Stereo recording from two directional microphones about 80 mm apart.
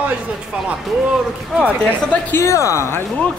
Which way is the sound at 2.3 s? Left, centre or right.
Left.